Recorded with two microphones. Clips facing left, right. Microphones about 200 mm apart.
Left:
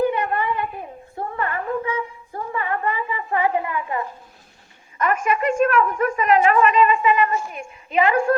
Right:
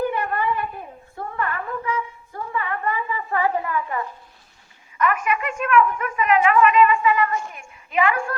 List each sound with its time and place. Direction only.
0.0 s a sound: 20° left (ahead or behind)
5.3 s a woman's voice: 45° left (ahead or behind)
6.8 s a woman's voice: 20° left (ahead or behind)